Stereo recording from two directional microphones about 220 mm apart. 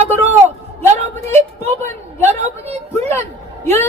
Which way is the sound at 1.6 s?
10° left (ahead or behind).